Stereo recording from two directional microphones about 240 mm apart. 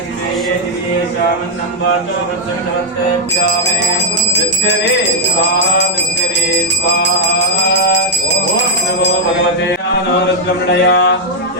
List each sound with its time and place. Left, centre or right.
7.0 s music: left
10.7 s speech: left